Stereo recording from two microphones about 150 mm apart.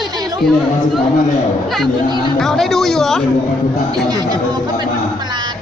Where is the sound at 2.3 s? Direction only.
Centre (ahead or behind).